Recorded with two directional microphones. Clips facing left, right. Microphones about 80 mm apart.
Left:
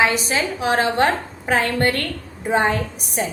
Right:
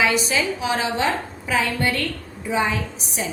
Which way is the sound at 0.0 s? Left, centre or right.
Left.